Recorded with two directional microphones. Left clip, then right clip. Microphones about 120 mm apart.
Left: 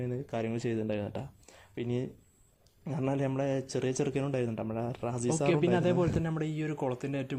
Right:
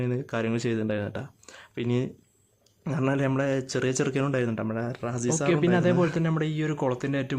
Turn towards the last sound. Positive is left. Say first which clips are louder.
# right 6 dB
turn(degrees=15)  # may be behind; listen again after turning